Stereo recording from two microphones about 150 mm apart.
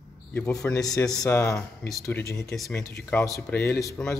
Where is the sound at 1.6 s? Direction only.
Centre (ahead or behind).